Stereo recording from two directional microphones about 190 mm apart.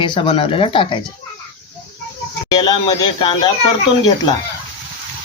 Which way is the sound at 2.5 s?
20° left (ahead or behind).